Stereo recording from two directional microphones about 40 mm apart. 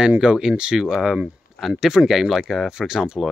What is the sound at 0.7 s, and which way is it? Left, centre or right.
Speech, centre.